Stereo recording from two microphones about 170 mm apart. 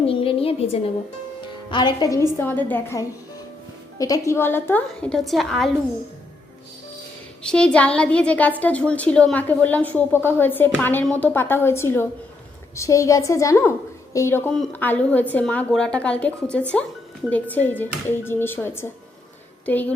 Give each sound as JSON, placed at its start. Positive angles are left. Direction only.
{"t": 0.1, "sound": "a sound", "side_deg": 30}
{"t": 1.7, "sound": "a woman's voice", "side_deg": 25}
{"t": 2.4, "sound": "a woman's voice", "side_deg": 10}
{"t": 7.4, "sound": "a woman's voice", "side_deg": 5}